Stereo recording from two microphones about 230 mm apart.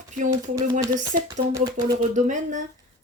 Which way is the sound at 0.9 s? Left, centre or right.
Centre.